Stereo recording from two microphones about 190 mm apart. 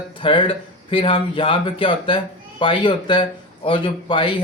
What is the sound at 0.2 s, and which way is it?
Speech, 25° left (ahead or behind).